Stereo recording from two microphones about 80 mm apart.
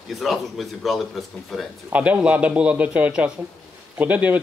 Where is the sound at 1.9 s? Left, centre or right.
Centre.